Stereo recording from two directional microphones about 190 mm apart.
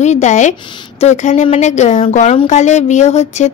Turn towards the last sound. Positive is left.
turn(degrees=35)  # may be behind; listen again after turning